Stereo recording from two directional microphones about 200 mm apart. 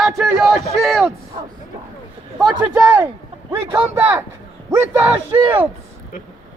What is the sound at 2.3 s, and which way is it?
A man's voice, 5° right (ahead or behind).